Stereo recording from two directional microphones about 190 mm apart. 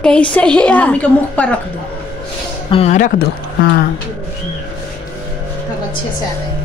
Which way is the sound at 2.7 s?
35° left (ahead or behind).